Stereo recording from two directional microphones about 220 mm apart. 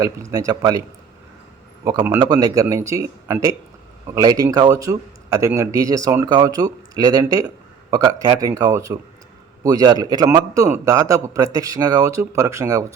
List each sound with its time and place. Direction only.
0.0 s speech: 15° right (ahead or behind)
1.8 s speech: 15° right (ahead or behind)